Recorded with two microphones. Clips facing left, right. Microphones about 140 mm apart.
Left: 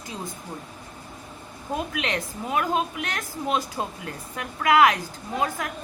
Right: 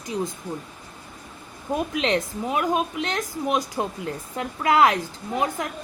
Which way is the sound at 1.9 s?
25° right (ahead or behind).